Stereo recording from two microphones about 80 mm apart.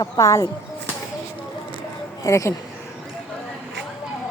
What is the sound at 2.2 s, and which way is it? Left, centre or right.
Speech, left.